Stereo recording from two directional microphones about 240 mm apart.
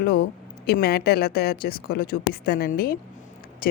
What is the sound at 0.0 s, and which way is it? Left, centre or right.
Speech, left.